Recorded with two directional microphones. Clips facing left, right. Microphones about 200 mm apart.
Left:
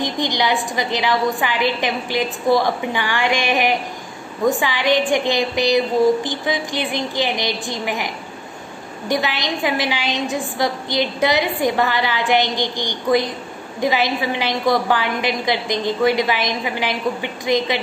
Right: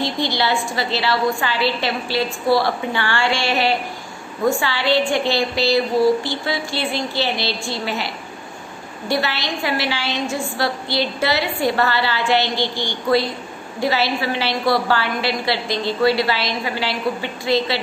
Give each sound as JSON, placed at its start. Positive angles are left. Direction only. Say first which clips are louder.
{"t": 0.0, "sound": "a woman's voice", "louder": "even", "side_deg": 15}